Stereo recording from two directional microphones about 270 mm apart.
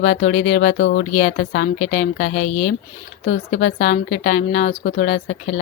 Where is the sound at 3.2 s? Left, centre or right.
Left.